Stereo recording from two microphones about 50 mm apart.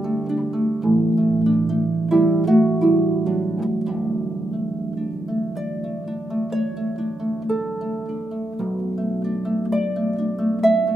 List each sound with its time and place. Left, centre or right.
0.1 s music: centre
2.7 s harp: centre
6.3 s harp: centre
9.0 s harp: centre